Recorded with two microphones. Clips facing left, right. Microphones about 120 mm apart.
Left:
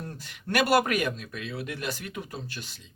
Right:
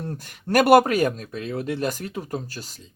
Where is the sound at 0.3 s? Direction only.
35° right (ahead or behind).